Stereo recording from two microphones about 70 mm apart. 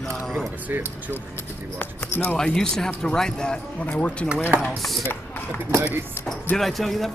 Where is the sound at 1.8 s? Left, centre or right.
Left.